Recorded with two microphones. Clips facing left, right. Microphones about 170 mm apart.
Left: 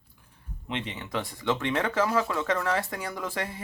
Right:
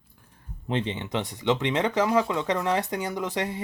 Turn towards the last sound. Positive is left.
turn(degrees=-20)  # may be behind; listen again after turning